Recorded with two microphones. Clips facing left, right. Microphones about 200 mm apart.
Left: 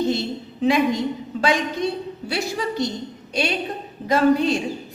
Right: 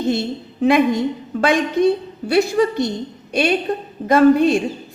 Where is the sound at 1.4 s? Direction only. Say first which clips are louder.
Right 6 dB; 55° right (ahead or behind).